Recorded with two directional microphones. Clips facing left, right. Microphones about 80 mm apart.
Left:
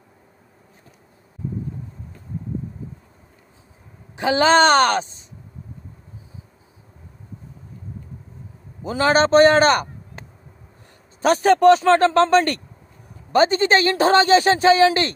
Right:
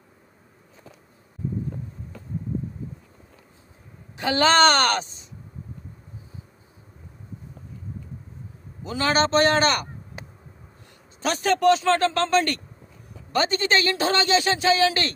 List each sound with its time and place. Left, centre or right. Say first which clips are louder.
4.2 s a woman's voice: left 3 dB; left
8.8 s a man's voice: left 5 dB; left
11.2 s a man's voice: left 6 dB; left